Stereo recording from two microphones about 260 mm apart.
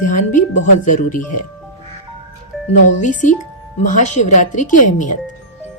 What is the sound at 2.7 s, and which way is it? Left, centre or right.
Speech, left.